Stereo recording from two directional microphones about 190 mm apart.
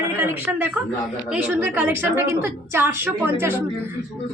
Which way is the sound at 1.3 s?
10° right (ahead or behind).